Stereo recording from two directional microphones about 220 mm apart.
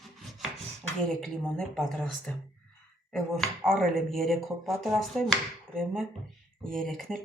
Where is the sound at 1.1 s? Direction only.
Centre (ahead or behind).